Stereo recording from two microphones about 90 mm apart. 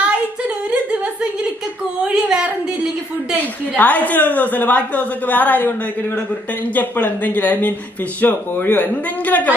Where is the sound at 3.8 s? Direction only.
20° left (ahead or behind).